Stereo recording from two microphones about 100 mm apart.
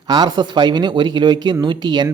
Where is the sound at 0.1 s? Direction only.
45° right (ahead or behind).